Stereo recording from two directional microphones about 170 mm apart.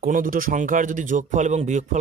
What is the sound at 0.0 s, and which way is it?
Speech, 55° right (ahead or behind).